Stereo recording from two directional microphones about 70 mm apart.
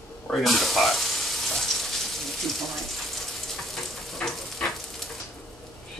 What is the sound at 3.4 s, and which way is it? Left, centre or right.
Frying, centre.